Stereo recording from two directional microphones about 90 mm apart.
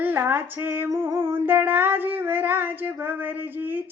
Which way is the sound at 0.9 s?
30° right (ahead or behind).